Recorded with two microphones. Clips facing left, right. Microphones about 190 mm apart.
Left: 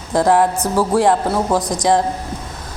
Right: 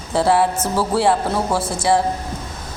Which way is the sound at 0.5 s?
15° left (ahead or behind).